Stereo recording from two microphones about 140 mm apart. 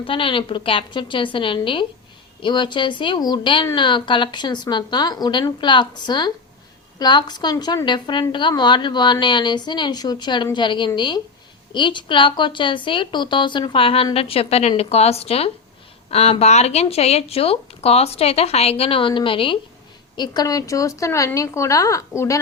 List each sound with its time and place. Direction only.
0.0 s a woman's voice: 40° left (ahead or behind); by 22.4 s 20° left (ahead or behind)